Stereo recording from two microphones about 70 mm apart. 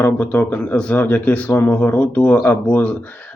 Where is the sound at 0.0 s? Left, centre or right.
Centre.